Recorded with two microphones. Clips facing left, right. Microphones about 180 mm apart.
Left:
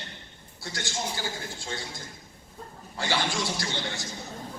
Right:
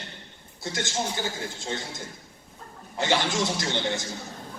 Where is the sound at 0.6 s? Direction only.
20° right (ahead or behind).